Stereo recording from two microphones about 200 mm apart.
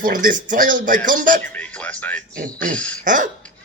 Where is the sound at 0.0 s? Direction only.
45° right (ahead or behind).